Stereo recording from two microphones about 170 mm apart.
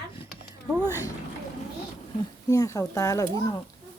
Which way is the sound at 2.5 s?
20° left (ahead or behind).